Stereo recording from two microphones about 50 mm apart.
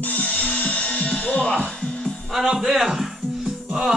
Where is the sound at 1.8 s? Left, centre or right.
Centre.